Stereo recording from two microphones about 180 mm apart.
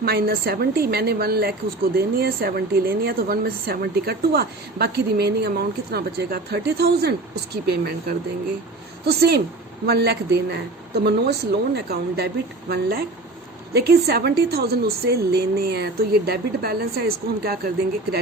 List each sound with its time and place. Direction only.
0.0 s a woman's voice: 60° right (ahead or behind)